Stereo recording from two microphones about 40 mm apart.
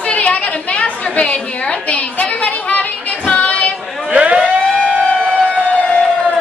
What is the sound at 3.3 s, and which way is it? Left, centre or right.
Female singing, left.